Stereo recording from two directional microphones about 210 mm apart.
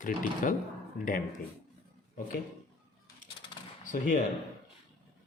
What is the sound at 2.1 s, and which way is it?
Speech, 45° left (ahead or behind).